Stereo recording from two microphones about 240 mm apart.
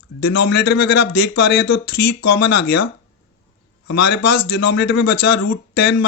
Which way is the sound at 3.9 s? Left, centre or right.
Left.